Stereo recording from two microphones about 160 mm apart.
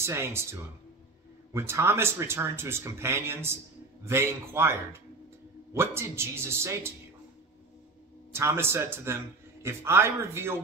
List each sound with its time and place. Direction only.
0.0 s a man's voice: 15° right (ahead or behind)
8.3 s a man's voice: 15° right (ahead or behind)